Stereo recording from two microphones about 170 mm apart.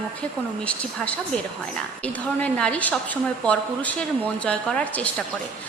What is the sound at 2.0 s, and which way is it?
A woman's voice, 5° left (ahead or behind).